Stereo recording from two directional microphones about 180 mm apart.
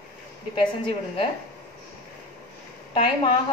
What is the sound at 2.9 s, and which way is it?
Speech, 25° left (ahead or behind).